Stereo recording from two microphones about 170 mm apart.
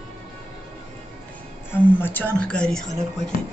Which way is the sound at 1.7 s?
10° left (ahead or behind).